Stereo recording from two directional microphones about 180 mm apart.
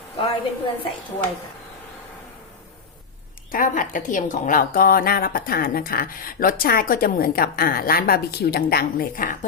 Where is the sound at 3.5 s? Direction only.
50° left (ahead or behind).